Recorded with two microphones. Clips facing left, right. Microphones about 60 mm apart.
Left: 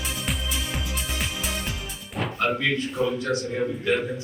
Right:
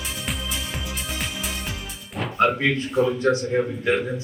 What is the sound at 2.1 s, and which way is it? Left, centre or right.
Music, centre.